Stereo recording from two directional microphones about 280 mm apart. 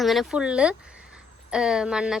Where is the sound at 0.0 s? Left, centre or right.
Centre.